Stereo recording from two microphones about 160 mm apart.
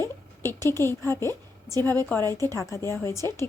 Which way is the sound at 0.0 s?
15° left (ahead or behind).